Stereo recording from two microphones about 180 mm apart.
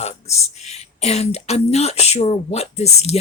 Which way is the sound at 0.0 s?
35° left (ahead or behind).